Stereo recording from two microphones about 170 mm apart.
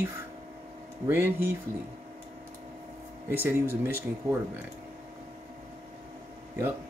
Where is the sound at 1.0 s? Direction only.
15° right (ahead or behind).